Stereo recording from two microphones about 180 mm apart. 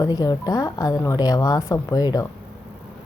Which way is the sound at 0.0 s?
20° left (ahead or behind).